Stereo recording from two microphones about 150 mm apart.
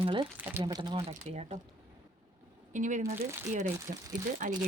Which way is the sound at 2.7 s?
55° right (ahead or behind).